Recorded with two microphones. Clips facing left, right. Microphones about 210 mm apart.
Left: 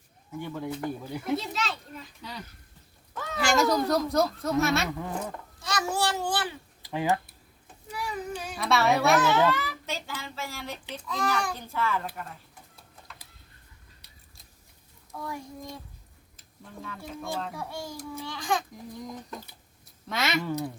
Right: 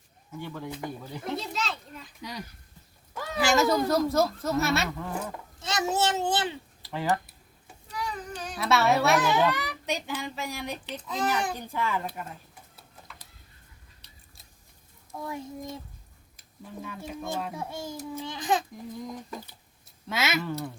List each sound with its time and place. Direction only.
0.3 s speech: 10° left (ahead or behind)
1.4 s speech: centre (ahead or behind)
3.2 s speech: 5° right (ahead or behind)
4.9 s speech: 15° left (ahead or behind)
5.5 s a child's voice: 20° right (ahead or behind)
6.8 s speech: 15° left (ahead or behind)
7.9 s child singing: 10° left (ahead or behind)
8.5 s speech: centre (ahead or behind)
9.2 s a child's voice: 15° right (ahead or behind)
15.1 s a child's voice: 20° right (ahead or behind)
18.9 s speech: centre (ahead or behind)
20.4 s speech: 15° left (ahead or behind)